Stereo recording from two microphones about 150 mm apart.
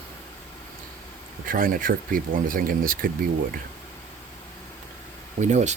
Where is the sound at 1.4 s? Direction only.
70° right (ahead or behind).